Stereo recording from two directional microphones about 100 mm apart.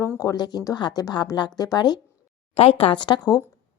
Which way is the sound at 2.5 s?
70° left (ahead or behind).